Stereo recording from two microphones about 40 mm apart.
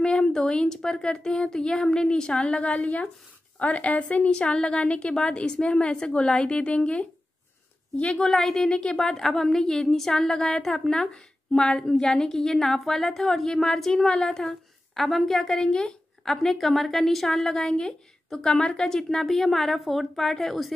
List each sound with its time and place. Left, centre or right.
0.0 s a woman's voice: centre
8.3 s a woman's voice: centre
11.5 s a woman's voice: left
16.3 s a woman's voice: centre
18.9 s a woman's voice: centre